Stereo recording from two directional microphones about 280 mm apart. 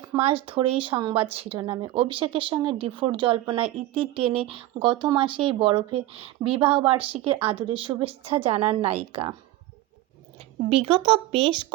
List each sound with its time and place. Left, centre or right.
0.1 s speech: right
10.3 s a woman's voice: right